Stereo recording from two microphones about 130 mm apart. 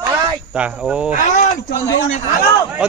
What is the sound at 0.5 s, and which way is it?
Speech, 10° right (ahead or behind).